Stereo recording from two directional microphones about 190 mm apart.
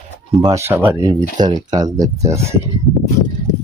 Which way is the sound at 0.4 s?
15° right (ahead or behind).